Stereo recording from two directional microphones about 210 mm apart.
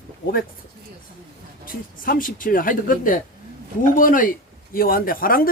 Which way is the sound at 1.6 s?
45° left (ahead or behind).